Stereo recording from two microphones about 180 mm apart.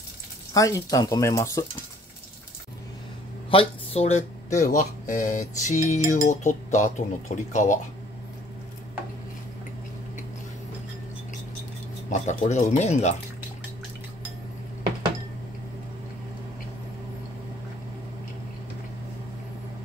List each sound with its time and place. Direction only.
0.6 s speech: 20° left (ahead or behind)
3.4 s speech: 30° left (ahead or behind)
12.1 s speech: 40° left (ahead or behind)